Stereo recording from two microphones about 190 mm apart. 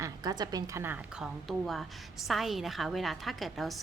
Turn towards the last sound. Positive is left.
turn(degrees=0)  # may be behind; listen again after turning